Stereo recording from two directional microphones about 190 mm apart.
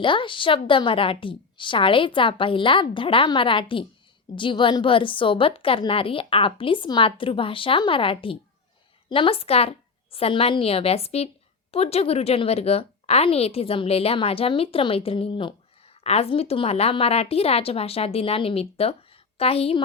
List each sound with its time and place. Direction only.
0.0 s a woman's voice: 25° left (ahead or behind)